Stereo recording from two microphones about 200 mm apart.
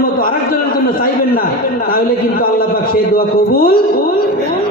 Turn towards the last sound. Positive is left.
turn(degrees=50)  # may be behind; listen again after turning